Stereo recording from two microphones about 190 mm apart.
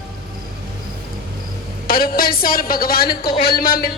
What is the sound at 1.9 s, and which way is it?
Speech, 50° left (ahead or behind).